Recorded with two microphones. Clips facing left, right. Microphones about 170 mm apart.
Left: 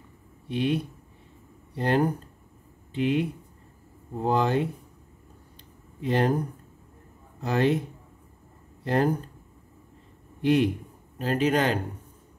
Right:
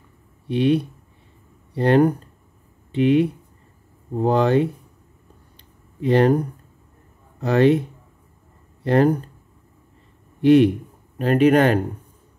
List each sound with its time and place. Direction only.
0.5 s speech: 75° right (ahead or behind)
1.8 s speech: 70° right (ahead or behind)
6.0 s speech: 75° right (ahead or behind)
7.4 s speech: 70° right (ahead or behind)
8.8 s speech: 70° right (ahead or behind)
10.4 s speech: 70° right (ahead or behind)